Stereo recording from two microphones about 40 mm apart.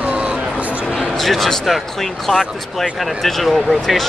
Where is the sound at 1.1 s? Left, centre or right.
Centre.